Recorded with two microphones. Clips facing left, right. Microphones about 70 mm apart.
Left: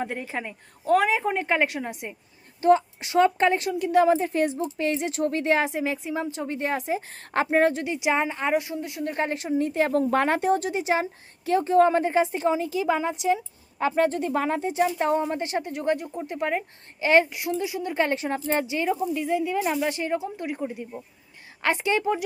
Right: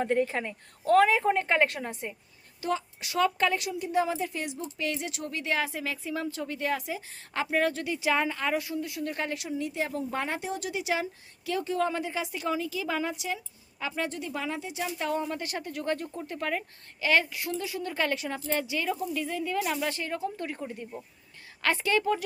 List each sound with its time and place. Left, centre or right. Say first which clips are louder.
0.0 s speech: right 3 dB; centre
2.6 s speech: left 12 dB; left
3.7 s a woman's voice: left 8 dB; left
4.1 s speech: left 10 dB; left
7.1 s speech: left 6 dB; left
7.5 s speech: left 5 dB; left
10.6 s speech: left 5 dB; left
13.7 s speech: left 10 dB; left
18.6 s speech: left 5 dB; left